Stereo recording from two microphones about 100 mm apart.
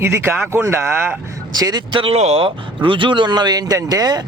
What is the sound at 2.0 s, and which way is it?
Speech, 90° right.